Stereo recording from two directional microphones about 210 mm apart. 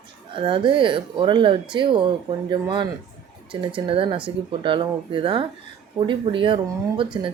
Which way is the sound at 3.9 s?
25° right (ahead or behind).